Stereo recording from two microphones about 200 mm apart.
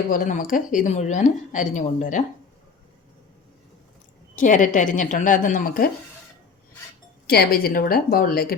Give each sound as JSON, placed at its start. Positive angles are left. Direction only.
{"t": 0.1, "sound": "a woman's voice", "side_deg": 40}
{"t": 4.4, "sound": "a woman's voice", "side_deg": 40}
{"t": 7.3, "sound": "a woman's voice", "side_deg": 50}